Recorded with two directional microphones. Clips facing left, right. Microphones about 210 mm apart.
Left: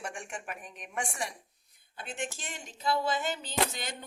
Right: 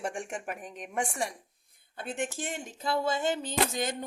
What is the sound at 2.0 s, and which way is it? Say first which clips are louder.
A woman's voice: right 5 dB; 55° right (ahead or behind).